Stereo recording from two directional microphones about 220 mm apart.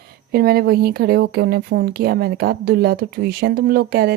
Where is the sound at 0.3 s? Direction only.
45° right (ahead or behind).